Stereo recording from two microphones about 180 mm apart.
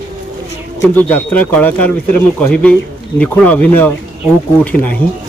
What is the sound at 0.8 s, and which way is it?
Speech, 10° left (ahead or behind).